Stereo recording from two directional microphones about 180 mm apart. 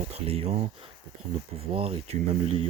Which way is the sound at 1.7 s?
30° right (ahead or behind).